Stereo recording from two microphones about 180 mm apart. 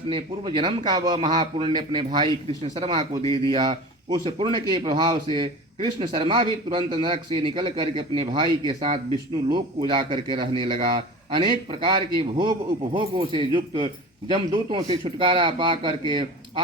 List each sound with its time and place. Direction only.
0.1 s speech: 30° right (ahead or behind)
3.2 s speech: 20° left (ahead or behind)
3.5 s speech: 25° right (ahead or behind)